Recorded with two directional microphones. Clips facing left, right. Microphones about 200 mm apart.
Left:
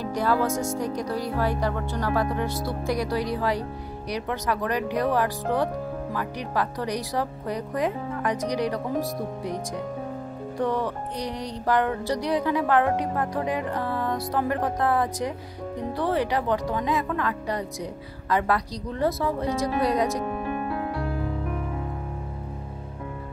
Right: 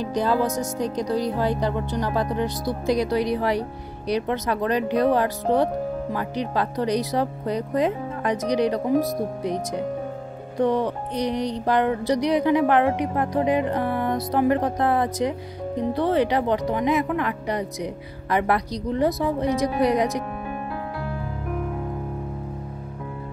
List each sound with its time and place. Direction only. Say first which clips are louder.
0.0 s speech: right 2 dB; 20° right (ahead or behind)